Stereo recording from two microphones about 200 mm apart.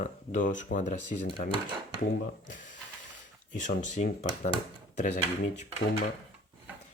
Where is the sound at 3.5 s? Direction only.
35° left (ahead or behind).